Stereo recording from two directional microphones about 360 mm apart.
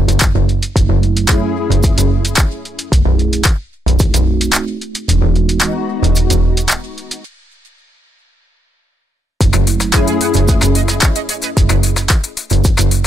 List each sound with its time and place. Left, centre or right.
0.0 s music: centre
9.4 s music: centre